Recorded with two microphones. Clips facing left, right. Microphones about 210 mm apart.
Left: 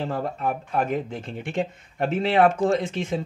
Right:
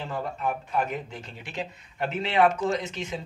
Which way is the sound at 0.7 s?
50° left (ahead or behind).